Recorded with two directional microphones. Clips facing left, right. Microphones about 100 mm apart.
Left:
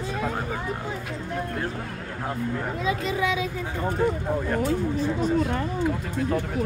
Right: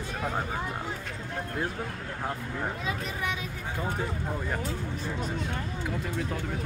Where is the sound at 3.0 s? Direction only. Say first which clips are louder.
Left 8 dB; 90° left.